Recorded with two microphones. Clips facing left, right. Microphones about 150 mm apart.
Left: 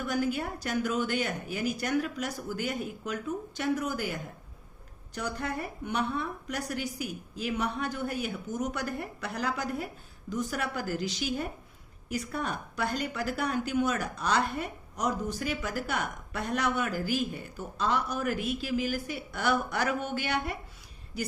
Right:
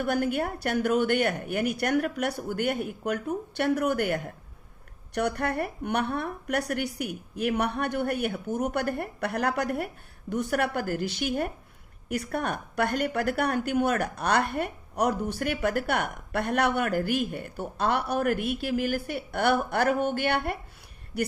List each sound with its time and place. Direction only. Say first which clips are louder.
0.0 s speech: right 4 dB; 60° right (ahead or behind)